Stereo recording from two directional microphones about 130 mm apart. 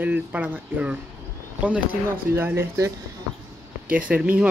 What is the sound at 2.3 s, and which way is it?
Speech, 20° right (ahead or behind).